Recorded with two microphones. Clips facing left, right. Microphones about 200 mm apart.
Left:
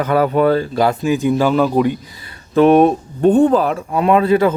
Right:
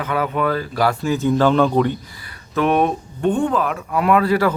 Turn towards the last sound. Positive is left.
turn(degrees=20)  # may be behind; listen again after turning